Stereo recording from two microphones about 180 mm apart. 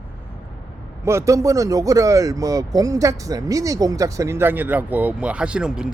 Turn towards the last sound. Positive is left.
turn(degrees=-5)  # may be behind; listen again after turning